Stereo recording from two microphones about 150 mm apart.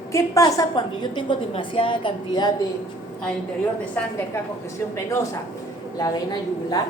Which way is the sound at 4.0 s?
10° left (ahead or behind).